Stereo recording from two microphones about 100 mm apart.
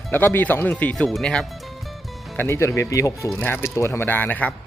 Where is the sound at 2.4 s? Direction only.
25° left (ahead or behind).